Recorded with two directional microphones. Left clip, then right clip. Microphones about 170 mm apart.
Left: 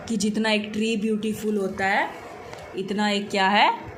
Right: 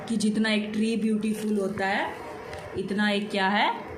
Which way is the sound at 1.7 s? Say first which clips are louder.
Left 6 dB; 55° left (ahead or behind).